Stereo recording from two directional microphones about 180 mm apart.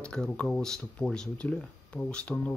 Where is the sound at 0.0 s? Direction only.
5° left (ahead or behind).